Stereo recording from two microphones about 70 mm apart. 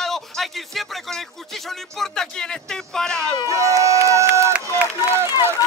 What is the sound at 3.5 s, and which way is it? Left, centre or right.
Speech, right.